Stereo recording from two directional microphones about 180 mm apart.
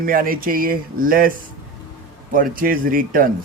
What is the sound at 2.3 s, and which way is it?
Speech, 50° right (ahead or behind).